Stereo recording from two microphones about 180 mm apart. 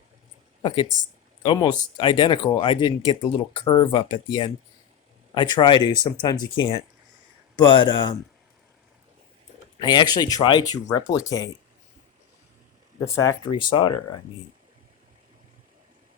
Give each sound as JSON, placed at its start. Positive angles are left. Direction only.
{"t": 1.4, "sound": "speech", "side_deg": 25}
{"t": 9.8, "sound": "speech", "side_deg": 25}
{"t": 13.1, "sound": "speech", "side_deg": 20}